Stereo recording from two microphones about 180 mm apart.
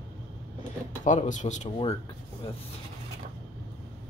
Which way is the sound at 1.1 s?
45° left (ahead or behind).